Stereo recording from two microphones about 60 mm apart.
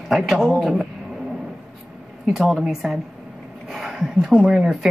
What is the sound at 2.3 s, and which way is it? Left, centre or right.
A man's voice, centre.